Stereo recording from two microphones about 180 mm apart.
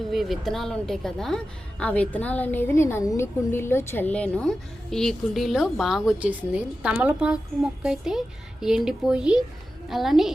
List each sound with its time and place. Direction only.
0.1 s speech: centre (ahead or behind)